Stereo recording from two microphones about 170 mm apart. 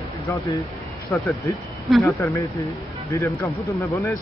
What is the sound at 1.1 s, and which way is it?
Speech, 15° left (ahead or behind).